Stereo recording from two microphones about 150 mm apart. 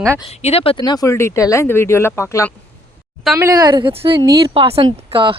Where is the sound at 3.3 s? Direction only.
20° right (ahead or behind).